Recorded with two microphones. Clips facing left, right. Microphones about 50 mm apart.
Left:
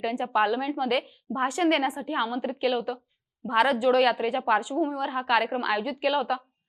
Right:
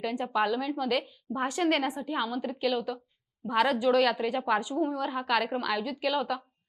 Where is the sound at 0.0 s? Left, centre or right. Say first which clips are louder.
Left 4 dB; centre.